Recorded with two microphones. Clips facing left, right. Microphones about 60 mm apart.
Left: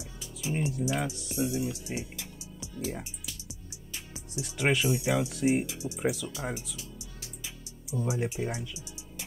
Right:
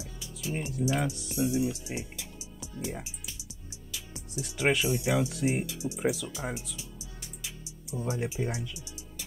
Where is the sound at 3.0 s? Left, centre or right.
Centre.